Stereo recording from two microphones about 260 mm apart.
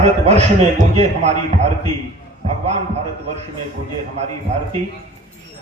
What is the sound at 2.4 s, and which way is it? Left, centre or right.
Speech, right.